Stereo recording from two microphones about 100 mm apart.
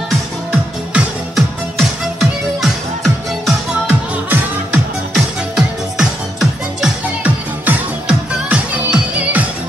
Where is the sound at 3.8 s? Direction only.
20° right (ahead or behind).